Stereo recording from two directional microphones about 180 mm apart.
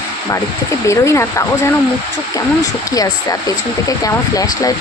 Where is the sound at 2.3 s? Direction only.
20° left (ahead or behind).